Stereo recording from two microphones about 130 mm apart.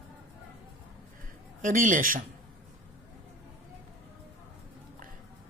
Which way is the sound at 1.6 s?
85° right.